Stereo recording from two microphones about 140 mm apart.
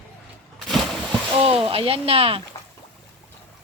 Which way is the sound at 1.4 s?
40° right (ahead or behind).